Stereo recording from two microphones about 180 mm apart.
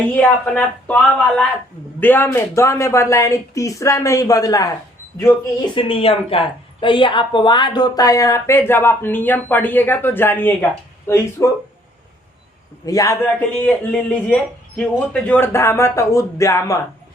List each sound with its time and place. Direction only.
0.1 s a woman's voice: 10° left (ahead or behind)
5.7 s a woman's voice: 30° left (ahead or behind); by 11.5 s 15° left (ahead or behind)
12.8 s a man's voice: 20° left (ahead or behind)
13.6 s a woman's voice: 10° left (ahead or behind)